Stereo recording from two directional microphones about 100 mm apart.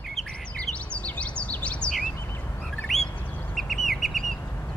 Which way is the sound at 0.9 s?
10° left (ahead or behind).